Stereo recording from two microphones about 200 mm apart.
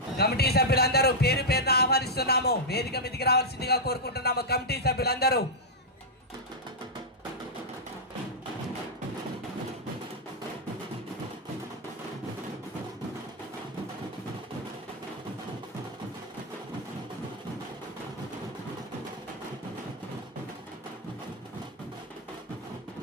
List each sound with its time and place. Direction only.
0.2 s speech: 55° left (ahead or behind)